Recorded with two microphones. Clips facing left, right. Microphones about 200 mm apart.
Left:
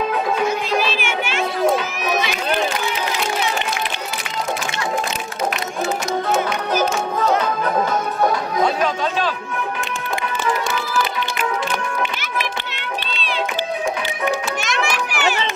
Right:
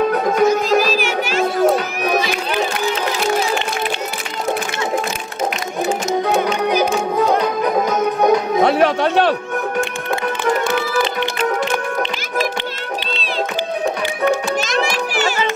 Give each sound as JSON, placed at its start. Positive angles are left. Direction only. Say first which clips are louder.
{"t": 0.1, "sound": "music", "louder": "right 5 dB", "side_deg": -40}
{"t": 8.2, "sound": "music", "louder": "right 5 dB", "side_deg": -20}
{"t": 8.6, "sound": "chatter", "louder": "right 5 dB", "side_deg": -65}
{"t": 14.6, "sound": "children playing", "louder": "right 4 dB", "side_deg": -40}